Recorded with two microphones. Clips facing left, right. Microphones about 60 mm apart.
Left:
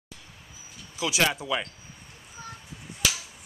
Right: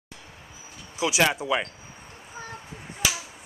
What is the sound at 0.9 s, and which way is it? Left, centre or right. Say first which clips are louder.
Speech: right 3 dB; centre.